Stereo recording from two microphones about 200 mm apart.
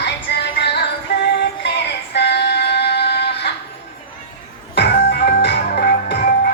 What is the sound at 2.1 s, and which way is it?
Female singing, 60° left (ahead or behind).